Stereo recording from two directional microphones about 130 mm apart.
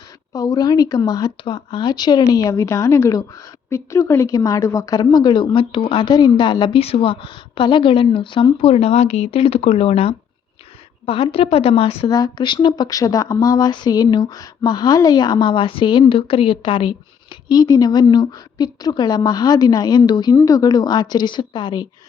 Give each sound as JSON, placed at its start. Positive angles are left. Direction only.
{"t": 0.3, "sound": "a woman's voice", "side_deg": 30}
{"t": 12.0, "sound": "speech", "side_deg": 30}
{"t": 17.5, "sound": "speech", "side_deg": 30}